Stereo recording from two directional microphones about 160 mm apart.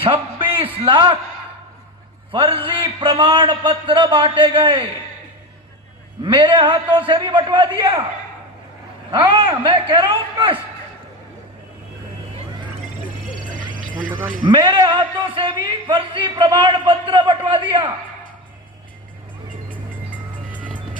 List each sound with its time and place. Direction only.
0.0 s a man's voice: 35° right (ahead or behind)
2.3 s a man's voice: 35° right (ahead or behind)
6.2 s a man's voice: 30° right (ahead or behind)
9.1 s a man's voice: 30° right (ahead or behind)
14.4 s a man's voice: 30° right (ahead or behind)
19.7 s music: 10° right (ahead or behind)